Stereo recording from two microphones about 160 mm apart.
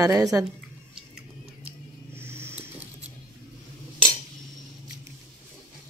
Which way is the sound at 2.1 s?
15° right (ahead or behind).